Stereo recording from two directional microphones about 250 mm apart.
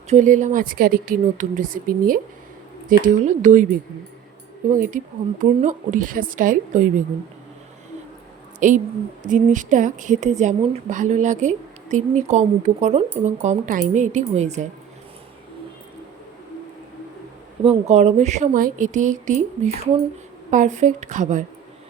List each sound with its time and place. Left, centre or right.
0.1 s speech: right
4.7 s speech: right
8.5 s a woman's voice: right
17.6 s a woman's voice: right